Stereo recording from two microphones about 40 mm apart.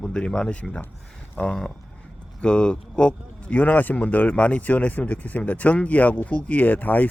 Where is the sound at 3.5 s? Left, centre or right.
Left.